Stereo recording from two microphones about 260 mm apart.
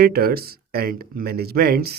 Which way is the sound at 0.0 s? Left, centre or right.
Right.